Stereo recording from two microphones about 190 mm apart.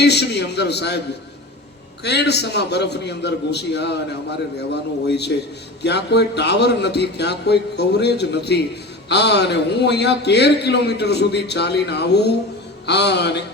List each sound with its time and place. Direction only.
0.0 s a man's voice: 60° left (ahead or behind)
2.0 s a man's voice: 60° left (ahead or behind)